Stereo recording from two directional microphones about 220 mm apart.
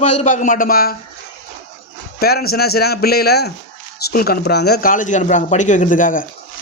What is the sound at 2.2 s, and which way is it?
Speech, 45° left (ahead or behind).